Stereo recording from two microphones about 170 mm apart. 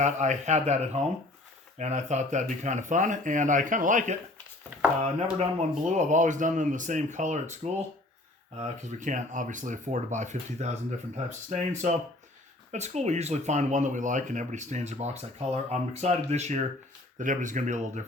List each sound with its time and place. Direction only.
0.0 s speech: 45° right (ahead or behind)
5.4 s speech: 40° right (ahead or behind)